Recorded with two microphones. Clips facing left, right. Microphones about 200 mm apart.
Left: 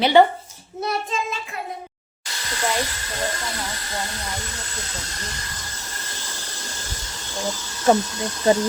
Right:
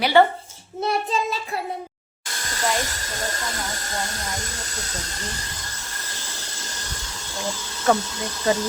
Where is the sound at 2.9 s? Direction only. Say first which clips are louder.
Left 2 dB; 45° right (ahead or behind).